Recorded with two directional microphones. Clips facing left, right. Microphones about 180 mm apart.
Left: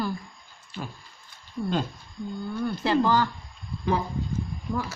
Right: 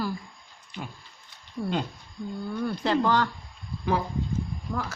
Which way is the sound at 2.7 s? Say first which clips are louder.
Left 1 dB; 5° left (ahead or behind).